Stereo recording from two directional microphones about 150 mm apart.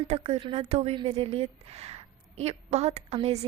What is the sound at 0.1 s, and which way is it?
A woman's voice, 40° right (ahead or behind).